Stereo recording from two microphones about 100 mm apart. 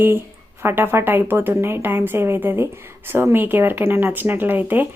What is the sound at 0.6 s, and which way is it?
Speech, 25° right (ahead or behind).